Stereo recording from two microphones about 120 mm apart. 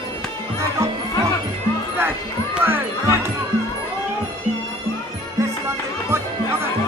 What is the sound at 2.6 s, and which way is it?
Music, 20° right (ahead or behind).